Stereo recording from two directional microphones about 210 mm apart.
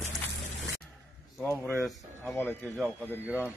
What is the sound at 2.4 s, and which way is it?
Speech, 5° right (ahead or behind).